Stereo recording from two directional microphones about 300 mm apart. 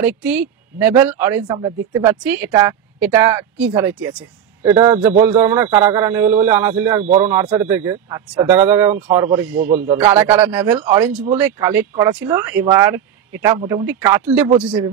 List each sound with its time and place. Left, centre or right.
0.7 s speech: centre
7.0 s speech: right
7.2 s speech: centre